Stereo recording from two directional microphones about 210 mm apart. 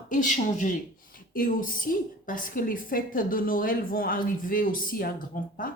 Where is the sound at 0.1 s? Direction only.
35° left (ahead or behind).